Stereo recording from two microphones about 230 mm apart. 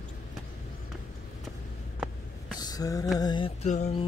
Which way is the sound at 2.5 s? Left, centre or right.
Centre.